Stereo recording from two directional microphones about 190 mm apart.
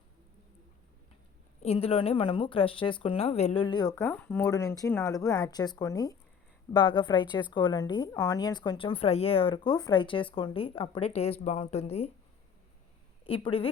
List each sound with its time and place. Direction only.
1.6 s a woman's voice: 30° left (ahead or behind)
4.0 s a woman's voice: 10° left (ahead or behind); by 12.1 s 30° left (ahead or behind)
13.2 s a woman's voice: 30° left (ahead or behind)